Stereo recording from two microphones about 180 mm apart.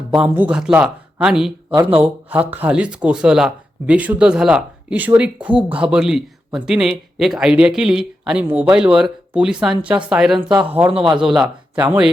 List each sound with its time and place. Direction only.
0.1 s speech: 5° right (ahead or behind)
10.9 s a man's voice: 25° right (ahead or behind)
11.2 s speech: 5° right (ahead or behind)